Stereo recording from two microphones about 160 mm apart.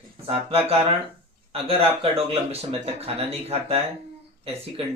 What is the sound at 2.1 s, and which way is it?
Speech, 40° right (ahead or behind).